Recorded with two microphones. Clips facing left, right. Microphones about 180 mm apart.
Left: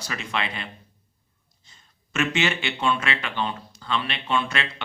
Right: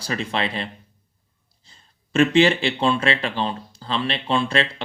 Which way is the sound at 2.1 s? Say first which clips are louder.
Right 9 dB; 30° right (ahead or behind).